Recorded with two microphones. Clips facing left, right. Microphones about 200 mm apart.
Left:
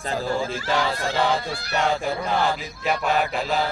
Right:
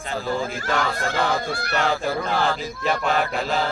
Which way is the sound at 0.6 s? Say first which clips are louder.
Even; 50° right (ahead or behind).